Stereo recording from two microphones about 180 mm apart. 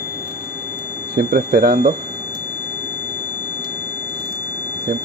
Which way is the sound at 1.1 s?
55° right (ahead or behind).